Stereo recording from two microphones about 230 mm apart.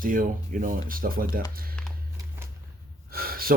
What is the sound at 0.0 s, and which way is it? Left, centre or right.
Speech, right.